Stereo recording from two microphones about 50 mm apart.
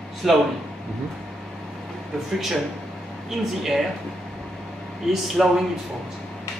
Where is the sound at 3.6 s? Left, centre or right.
Centre.